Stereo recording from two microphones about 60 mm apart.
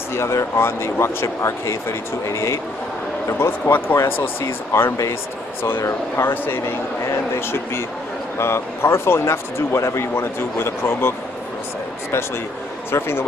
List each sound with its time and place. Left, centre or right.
0.1 s a man's voice: left
10.1 s a man's voice: left
12.9 s speech: left